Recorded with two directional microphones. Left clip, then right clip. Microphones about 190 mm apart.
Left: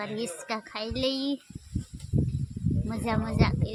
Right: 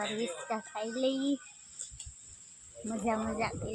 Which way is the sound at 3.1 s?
10° left (ahead or behind).